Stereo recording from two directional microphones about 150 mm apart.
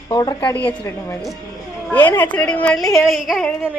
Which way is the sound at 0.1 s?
30° left (ahead or behind).